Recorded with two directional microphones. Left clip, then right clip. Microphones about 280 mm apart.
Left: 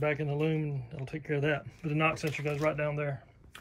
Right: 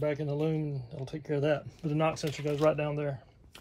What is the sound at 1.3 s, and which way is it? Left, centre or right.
Speech, right.